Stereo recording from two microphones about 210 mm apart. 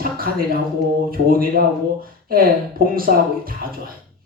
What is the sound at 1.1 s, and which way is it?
A man's voice, 45° right (ahead or behind).